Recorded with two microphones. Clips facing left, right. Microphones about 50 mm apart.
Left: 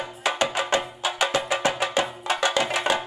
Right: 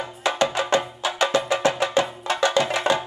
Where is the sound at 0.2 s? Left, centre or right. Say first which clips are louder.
Right 2 dB; left.